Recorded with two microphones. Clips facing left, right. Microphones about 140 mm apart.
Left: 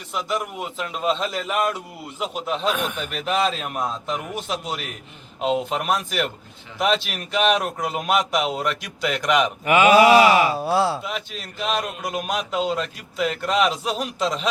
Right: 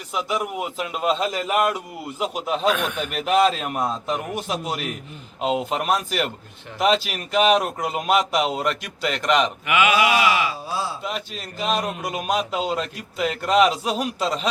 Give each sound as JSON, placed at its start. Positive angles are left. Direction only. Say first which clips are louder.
{"t": 0.1, "sound": "speech", "louder": "right 1 dB", "side_deg": -5}
{"t": 9.6, "sound": "mantra", "louder": "left 8 dB", "side_deg": 40}
{"t": 10.5, "sound": "a sound", "louder": "left 8 dB", "side_deg": 65}
{"t": 11.0, "sound": "speech", "louder": "right 1 dB", "side_deg": 0}